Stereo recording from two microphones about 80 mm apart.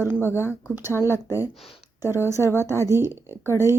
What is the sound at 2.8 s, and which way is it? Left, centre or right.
Speech, right.